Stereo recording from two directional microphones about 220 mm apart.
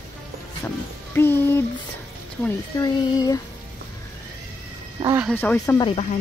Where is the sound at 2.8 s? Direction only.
15° left (ahead or behind).